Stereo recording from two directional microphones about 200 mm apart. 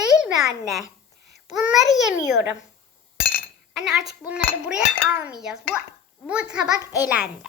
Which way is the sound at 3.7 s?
Centre (ahead or behind).